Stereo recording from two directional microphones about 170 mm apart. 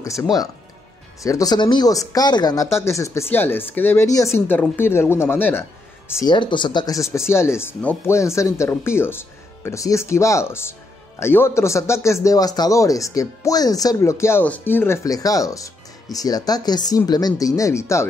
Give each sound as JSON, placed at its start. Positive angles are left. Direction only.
{"t": 0.0, "sound": "speech", "side_deg": 20}
{"t": 6.1, "sound": "speech", "side_deg": 25}